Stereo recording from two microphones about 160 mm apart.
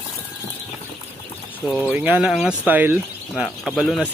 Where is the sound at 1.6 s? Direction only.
10° right (ahead or behind).